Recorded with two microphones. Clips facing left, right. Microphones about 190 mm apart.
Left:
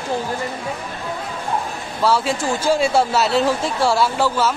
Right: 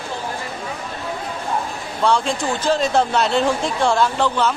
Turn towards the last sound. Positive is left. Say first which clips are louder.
# even
turn(degrees=5)  # may be behind; listen again after turning